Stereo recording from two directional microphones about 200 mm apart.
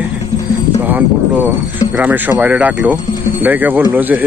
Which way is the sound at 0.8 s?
10° right (ahead or behind).